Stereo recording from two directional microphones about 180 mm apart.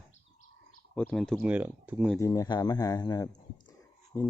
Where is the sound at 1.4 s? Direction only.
10° right (ahead or behind).